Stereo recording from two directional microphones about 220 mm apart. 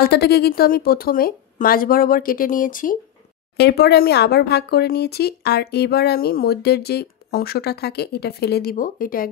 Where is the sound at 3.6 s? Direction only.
50° left (ahead or behind).